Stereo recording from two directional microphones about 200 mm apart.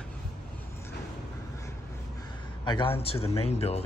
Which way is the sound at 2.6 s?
25° left (ahead or behind).